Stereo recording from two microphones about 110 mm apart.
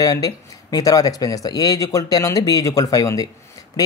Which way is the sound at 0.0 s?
35° left (ahead or behind).